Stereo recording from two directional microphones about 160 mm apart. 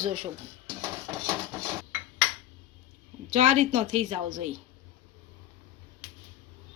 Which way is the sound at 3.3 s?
50° right (ahead or behind).